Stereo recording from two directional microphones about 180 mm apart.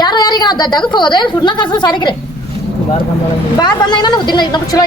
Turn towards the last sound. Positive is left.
turn(degrees=20)  # may be behind; listen again after turning